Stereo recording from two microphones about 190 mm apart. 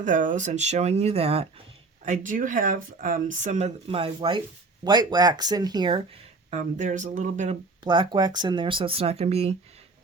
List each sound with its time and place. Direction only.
0.0 s speech: 40° right (ahead or behind); by 6.0 s 20° right (ahead or behind)
6.5 s speech: 40° right (ahead or behind)
7.9 s speech: 25° right (ahead or behind)